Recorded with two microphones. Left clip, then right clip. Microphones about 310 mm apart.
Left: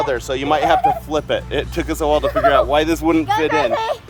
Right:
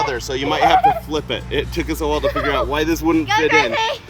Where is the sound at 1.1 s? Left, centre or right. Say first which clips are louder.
Left 3 dB; left.